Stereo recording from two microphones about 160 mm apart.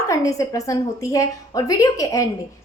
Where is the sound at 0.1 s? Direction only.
20° left (ahead or behind).